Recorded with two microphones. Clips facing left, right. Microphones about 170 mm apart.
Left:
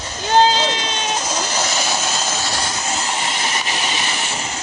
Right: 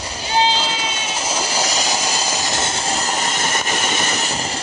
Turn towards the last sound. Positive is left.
turn(degrees=-35)  # may be behind; listen again after turning